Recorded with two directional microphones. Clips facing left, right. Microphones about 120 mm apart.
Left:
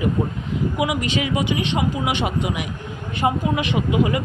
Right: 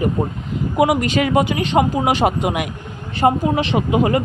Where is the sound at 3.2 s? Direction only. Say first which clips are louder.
Right 5 dB; 40° right (ahead or behind).